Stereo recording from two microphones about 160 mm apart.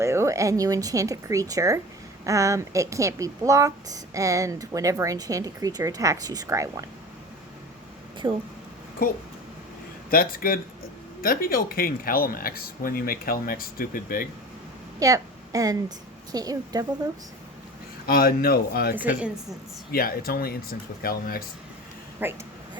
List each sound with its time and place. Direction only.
0.0 s speech: 15° right (ahead or behind)
8.2 s speech: 25° right (ahead or behind)
9.0 s speech: 65° left (ahead or behind)
14.9 s a woman's voice: 20° right (ahead or behind)
18.0 s speech: 70° left (ahead or behind)
19.0 s a woman's voice: 5° right (ahead or behind)
19.9 s speech: 65° left (ahead or behind)
22.2 s a woman's voice: 10° right (ahead or behind)